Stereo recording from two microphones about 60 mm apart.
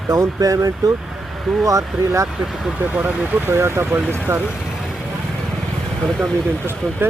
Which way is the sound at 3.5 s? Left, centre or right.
Right.